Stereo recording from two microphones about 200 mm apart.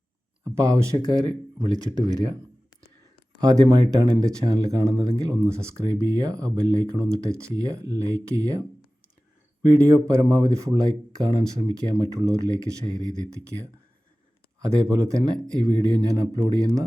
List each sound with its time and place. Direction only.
0.4 s speech: 15° right (ahead or behind)
3.4 s speech: 20° right (ahead or behind)
9.7 s speech: 15° right (ahead or behind)
14.6 s speech: 15° right (ahead or behind)